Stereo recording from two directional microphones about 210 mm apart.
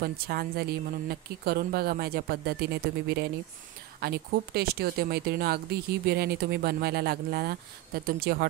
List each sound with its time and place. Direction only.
0.0 s speech: 45° right (ahead or behind)